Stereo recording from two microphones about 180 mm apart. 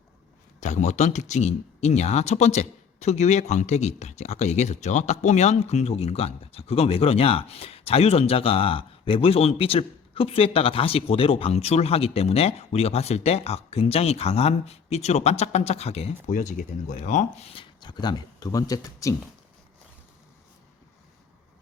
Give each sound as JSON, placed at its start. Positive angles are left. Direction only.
{"t": 0.6, "sound": "speech", "side_deg": 40}